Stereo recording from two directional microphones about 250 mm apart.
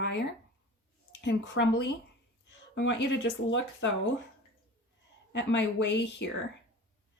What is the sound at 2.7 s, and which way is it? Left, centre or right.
Speech, left.